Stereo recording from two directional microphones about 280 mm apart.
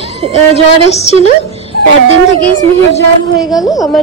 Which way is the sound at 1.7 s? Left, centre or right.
Left.